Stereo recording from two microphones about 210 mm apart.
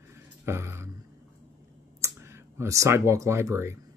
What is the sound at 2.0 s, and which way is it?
Speech, 10° right (ahead or behind).